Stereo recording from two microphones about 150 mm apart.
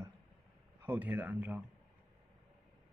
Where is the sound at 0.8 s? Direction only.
10° right (ahead or behind).